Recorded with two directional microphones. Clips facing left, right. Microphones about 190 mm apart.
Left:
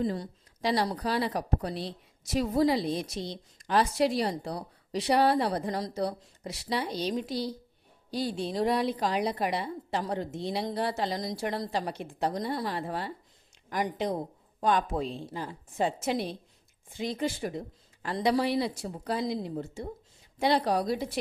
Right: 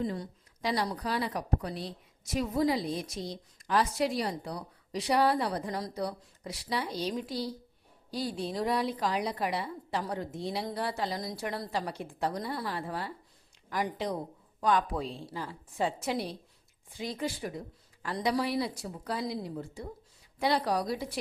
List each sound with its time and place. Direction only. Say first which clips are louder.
0.0 s a woman's voice: left 3 dB; 35° left (ahead or behind)